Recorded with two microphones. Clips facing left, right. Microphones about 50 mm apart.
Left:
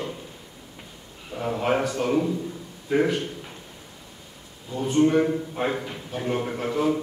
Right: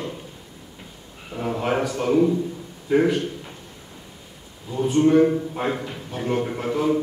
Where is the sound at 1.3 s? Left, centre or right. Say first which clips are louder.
Even; centre.